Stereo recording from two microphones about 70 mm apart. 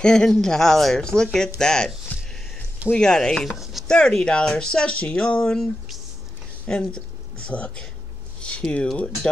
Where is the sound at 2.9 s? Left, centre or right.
Centre.